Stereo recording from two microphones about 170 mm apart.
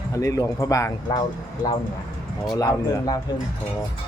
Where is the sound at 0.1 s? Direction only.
20° left (ahead or behind).